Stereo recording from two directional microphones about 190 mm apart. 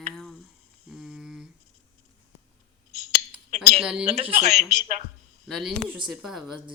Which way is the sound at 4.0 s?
30° right (ahead or behind).